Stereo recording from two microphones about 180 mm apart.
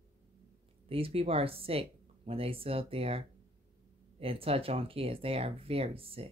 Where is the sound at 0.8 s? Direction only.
30° right (ahead or behind).